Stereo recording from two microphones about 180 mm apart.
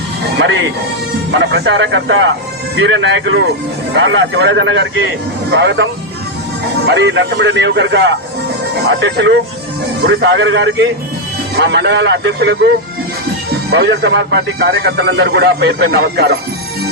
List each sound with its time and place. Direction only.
0.3 s music: 90° right
1.4 s speech: 75° right (ahead or behind)
11.5 s speech: 70° right (ahead or behind)
13.7 s speech: 65° right (ahead or behind)